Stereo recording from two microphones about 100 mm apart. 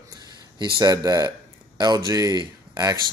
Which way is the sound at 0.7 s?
35° right (ahead or behind).